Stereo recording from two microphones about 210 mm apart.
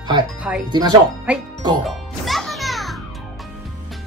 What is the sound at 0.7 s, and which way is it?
Speech, 20° right (ahead or behind).